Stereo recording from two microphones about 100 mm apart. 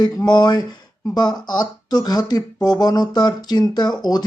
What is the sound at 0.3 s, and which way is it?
Speech, 45° left (ahead or behind).